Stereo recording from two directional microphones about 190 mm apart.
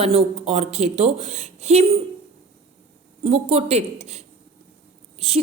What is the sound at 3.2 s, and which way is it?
A woman's voice, 35° right (ahead or behind).